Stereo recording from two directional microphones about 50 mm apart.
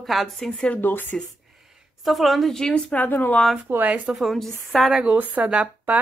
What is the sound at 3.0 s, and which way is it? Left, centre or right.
Speech, left.